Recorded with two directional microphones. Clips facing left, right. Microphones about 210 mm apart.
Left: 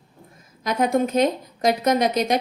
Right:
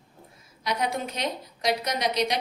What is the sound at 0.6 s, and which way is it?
A woman's voice, 50° left (ahead or behind).